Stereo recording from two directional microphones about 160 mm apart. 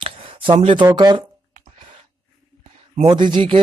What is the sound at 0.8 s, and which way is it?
Speech, 25° right (ahead or behind).